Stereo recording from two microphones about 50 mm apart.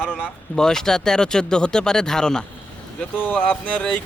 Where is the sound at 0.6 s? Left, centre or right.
Centre.